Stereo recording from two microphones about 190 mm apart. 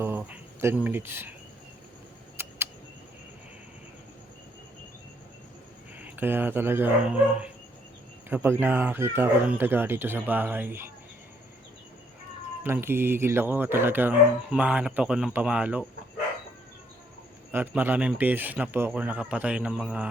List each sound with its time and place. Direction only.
0.0 s a sound: 10° right (ahead or behind)
0.9 s speech: 10° right (ahead or behind)
2.4 s a sound: 15° right (ahead or behind)
6.0 s speech: 10° right (ahead or behind)
12.6 s speech: 10° right (ahead or behind)
17.5 s speech: 10° right (ahead or behind)